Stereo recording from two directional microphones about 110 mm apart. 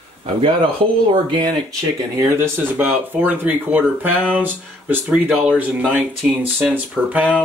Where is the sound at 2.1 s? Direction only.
25° right (ahead or behind).